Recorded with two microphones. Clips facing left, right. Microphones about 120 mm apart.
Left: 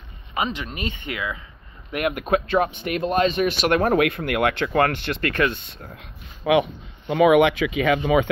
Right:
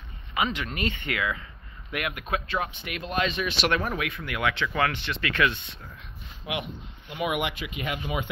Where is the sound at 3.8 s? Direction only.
60° left (ahead or behind).